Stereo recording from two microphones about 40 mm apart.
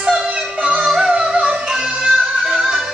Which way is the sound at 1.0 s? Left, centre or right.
Centre.